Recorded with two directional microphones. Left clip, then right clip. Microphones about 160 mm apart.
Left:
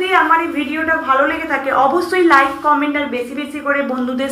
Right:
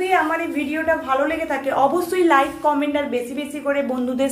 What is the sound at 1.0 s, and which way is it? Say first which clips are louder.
A woman's voice: left 5 dB; 40° right (ahead or behind).